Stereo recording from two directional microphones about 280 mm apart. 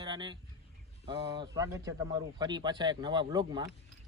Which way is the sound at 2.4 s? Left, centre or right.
Centre.